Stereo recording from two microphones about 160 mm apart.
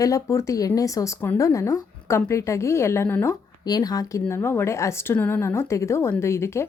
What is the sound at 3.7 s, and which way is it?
Speech, 25° left (ahead or behind).